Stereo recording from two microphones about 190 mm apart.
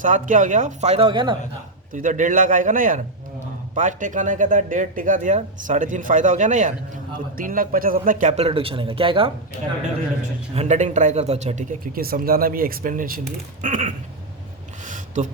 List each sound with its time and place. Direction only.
0.0 s speech: 45° right (ahead or behind); by 1.4 s 25° right (ahead or behind)
1.9 s speech: 45° right (ahead or behind); by 9.3 s 30° right (ahead or behind)
10.5 s speech: 35° right (ahead or behind)
11.9 s speech: 50° right (ahead or behind)
14.8 s a sound: 40° right (ahead or behind)